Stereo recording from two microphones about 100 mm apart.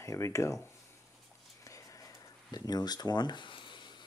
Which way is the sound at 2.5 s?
40° left (ahead or behind).